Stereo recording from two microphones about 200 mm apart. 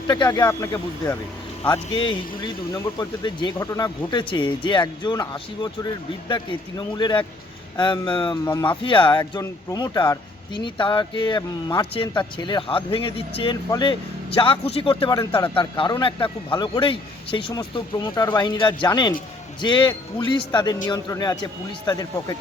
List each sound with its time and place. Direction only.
0.1 s speech: 20° left (ahead or behind)